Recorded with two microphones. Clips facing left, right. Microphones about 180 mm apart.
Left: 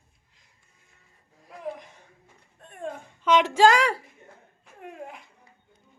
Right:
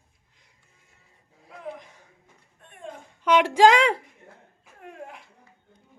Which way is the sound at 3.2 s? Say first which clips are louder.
Right 1 dB; 10° right (ahead or behind).